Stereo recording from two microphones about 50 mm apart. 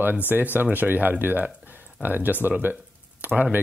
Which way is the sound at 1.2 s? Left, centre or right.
Right.